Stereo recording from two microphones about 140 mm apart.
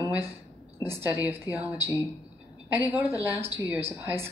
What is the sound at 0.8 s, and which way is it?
Speech, 15° right (ahead or behind).